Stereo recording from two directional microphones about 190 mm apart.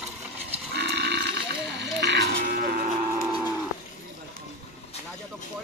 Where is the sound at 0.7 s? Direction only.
65° right (ahead or behind).